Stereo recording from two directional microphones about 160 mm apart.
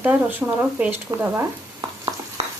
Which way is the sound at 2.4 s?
40° right (ahead or behind).